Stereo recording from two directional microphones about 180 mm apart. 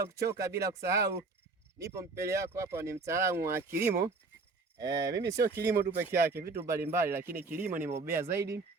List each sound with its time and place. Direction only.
0.0 s speech: 15° right (ahead or behind)